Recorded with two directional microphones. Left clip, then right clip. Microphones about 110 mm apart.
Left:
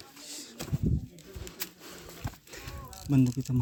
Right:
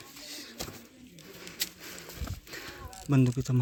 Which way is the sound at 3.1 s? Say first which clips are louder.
Even; 30° right (ahead or behind).